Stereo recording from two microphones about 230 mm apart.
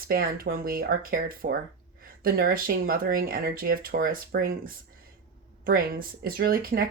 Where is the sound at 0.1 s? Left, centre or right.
Right.